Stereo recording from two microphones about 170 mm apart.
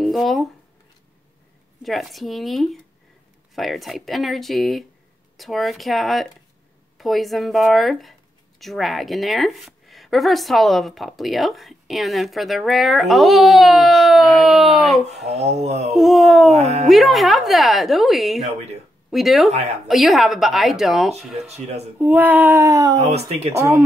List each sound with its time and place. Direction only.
0.0 s a sound: centre (ahead or behind)
1.8 s speech: centre (ahead or behind)
15.6 s speech: 40° right (ahead or behind)
15.9 s speech: centre (ahead or behind)
16.5 s speech: 40° right (ahead or behind)
16.9 s speech: centre (ahead or behind)
21.5 s speech: 40° right (ahead or behind)
21.9 s speech: 10° right (ahead or behind)
23.0 s speech: 40° right (ahead or behind)